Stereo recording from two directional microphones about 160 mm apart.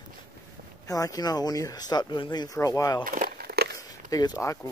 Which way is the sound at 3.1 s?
65° right (ahead or behind).